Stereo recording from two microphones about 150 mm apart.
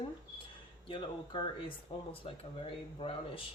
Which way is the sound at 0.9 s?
35° left (ahead or behind).